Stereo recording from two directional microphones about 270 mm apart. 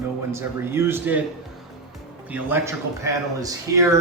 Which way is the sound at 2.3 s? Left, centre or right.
Centre.